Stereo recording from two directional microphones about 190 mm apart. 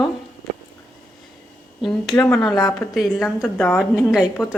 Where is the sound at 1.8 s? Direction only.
Centre (ahead or behind).